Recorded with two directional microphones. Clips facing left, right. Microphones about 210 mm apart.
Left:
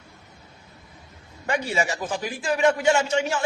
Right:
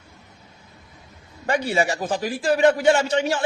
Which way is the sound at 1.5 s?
35° right (ahead or behind).